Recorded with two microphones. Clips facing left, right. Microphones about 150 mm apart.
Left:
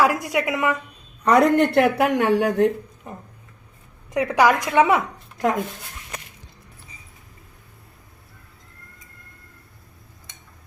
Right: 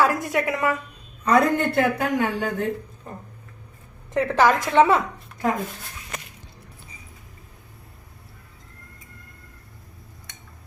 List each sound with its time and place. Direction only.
0.0 s a woman's voice: 20° left (ahead or behind)
1.2 s speech: 70° left (ahead or behind)
4.1 s a woman's voice: 15° left (ahead or behind)